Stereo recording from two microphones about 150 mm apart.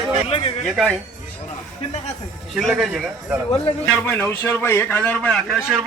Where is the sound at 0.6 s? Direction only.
Centre (ahead or behind).